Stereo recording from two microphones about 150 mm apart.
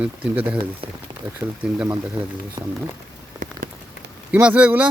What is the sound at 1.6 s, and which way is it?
Speech, 10° right (ahead or behind).